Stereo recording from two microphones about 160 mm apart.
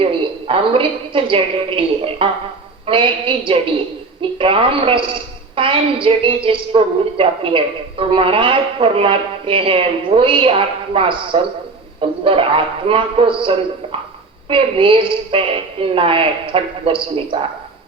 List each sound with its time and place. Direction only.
0.0 s a woman's voice: 35° right (ahead or behind)